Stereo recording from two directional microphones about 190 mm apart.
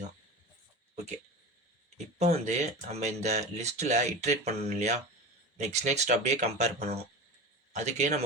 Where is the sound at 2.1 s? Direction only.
35° right (ahead or behind).